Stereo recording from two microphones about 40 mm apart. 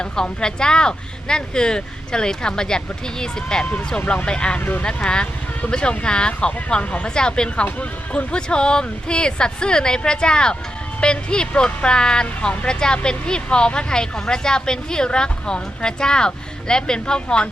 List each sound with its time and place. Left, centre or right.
0.0 s speech: left
4.0 s speech: left
4.3 s speech: left
7.6 s speech: left